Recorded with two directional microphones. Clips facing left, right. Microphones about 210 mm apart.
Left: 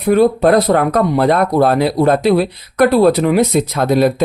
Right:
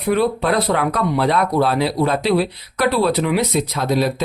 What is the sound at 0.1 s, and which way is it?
Speech, 45° left (ahead or behind).